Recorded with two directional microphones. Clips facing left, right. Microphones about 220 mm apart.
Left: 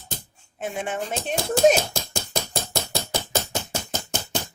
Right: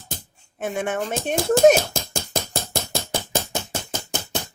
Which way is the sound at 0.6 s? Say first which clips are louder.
Right 4 dB; 60° right (ahead or behind).